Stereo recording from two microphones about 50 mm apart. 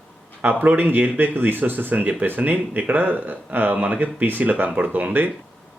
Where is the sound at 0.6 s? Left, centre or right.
Right.